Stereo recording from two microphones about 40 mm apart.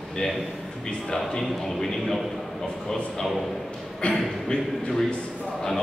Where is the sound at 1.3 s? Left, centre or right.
Centre.